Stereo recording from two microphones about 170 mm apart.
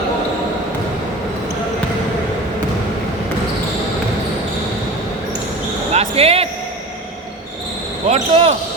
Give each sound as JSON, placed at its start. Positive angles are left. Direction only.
{"t": 5.9, "sound": "basketball bounce", "side_deg": -40}
{"t": 8.0, "sound": "basketball bounce", "side_deg": -40}